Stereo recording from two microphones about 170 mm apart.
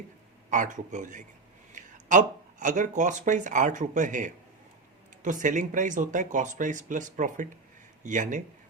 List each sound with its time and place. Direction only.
0.5 s speech: 45° right (ahead or behind)